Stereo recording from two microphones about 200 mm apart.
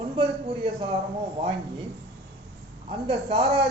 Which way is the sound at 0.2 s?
30° right (ahead or behind).